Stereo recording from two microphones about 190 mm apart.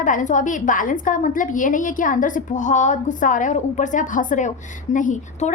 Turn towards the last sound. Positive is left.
turn(degrees=40)  # may be behind; listen again after turning